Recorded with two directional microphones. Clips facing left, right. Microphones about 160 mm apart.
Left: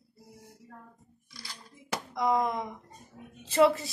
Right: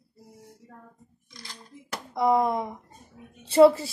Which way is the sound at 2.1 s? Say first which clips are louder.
Right 5 dB; 25° right (ahead or behind).